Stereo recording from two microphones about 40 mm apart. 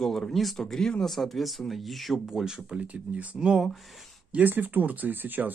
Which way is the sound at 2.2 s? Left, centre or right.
Centre.